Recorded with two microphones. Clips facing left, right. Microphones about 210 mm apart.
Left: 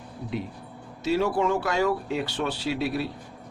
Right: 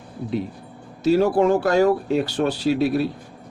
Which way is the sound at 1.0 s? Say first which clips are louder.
Right 7 dB; 40° right (ahead or behind).